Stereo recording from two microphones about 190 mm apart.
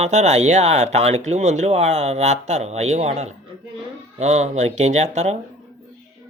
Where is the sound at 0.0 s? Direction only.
35° right (ahead or behind).